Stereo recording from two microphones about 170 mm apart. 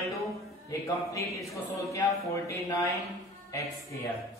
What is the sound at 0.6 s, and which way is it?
A woman's voice, 20° left (ahead or behind).